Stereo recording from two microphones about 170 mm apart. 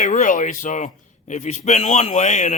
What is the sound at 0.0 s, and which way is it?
A man's voice, 45° left (ahead or behind).